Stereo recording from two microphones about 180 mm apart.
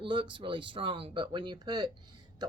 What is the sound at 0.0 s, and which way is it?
Speech, 25° right (ahead or behind).